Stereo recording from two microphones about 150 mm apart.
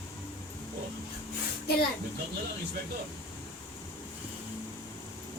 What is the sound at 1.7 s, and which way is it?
Speech, 90° left.